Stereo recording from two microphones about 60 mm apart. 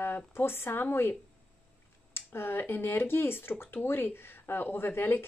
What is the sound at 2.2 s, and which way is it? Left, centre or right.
Speech, left.